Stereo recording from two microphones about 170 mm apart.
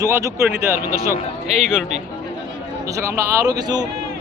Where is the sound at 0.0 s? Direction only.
20° right (ahead or behind).